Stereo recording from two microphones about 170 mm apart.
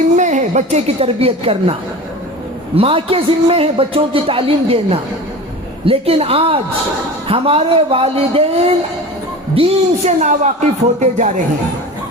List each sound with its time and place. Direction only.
0.2 s a woman's voice: 45° right (ahead or behind)
2.7 s a man's voice: 35° right (ahead or behind)